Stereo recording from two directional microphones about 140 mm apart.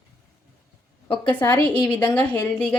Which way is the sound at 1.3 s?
15° left (ahead or behind).